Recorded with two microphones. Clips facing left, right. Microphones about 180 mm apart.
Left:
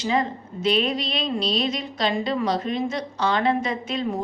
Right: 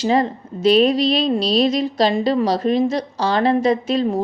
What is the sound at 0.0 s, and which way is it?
Speech, 35° right (ahead or behind).